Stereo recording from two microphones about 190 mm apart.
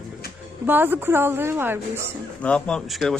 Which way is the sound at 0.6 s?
10° right (ahead or behind).